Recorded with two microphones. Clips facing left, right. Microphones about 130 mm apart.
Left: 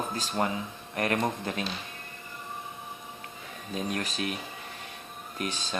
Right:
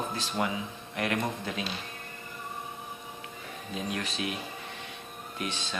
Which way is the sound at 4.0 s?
40° left (ahead or behind).